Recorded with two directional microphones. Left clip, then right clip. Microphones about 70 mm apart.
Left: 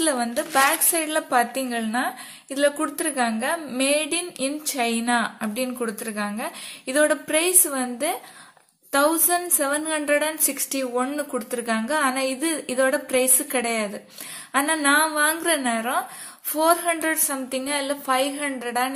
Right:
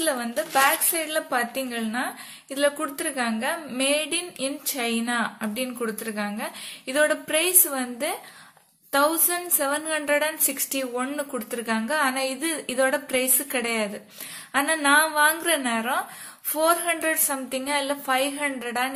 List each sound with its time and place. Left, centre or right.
0.0 s a woman's voice: left
1.3 s a woman's voice: left
8.9 s a woman's voice: left
10.1 s a woman's voice: centre
11.1 s a woman's voice: left
12.4 s a woman's voice: centre
13.4 s a woman's voice: left
14.5 s a woman's voice: centre
17.6 s a woman's voice: left
17.8 s a woman's voice: centre